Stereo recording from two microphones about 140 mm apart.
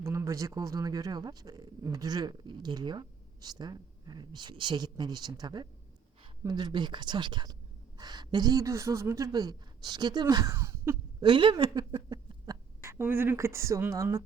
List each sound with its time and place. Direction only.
0.0 s speech: 20° right (ahead or behind)
11.2 s speech: 35° right (ahead or behind)
12.8 s speech: 15° right (ahead or behind)